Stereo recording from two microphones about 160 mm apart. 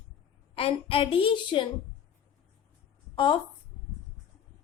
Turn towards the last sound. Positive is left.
turn(degrees=30)  # may be behind; listen again after turning